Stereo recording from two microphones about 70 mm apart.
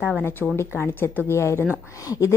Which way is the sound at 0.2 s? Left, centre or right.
Left.